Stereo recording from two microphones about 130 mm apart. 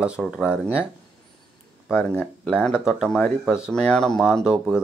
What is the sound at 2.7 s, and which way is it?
Speech, 5° right (ahead or behind).